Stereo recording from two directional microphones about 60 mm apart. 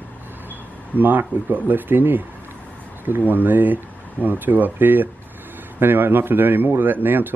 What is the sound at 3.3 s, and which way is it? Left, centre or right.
Speech, right.